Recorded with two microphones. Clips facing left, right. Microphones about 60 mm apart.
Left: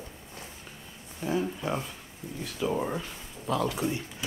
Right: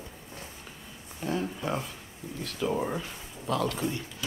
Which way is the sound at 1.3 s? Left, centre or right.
Centre.